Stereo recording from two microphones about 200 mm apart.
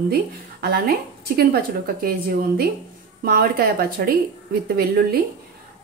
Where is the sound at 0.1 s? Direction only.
50° right (ahead or behind).